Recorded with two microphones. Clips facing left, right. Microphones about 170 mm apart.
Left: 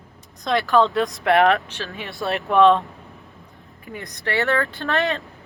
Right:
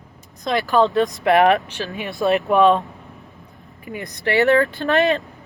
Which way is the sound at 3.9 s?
15° right (ahead or behind).